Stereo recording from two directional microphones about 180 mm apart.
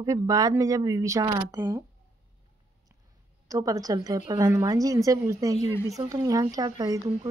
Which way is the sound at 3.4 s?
20° right (ahead or behind).